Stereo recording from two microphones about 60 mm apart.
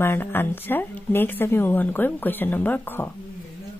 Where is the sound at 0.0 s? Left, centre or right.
Left.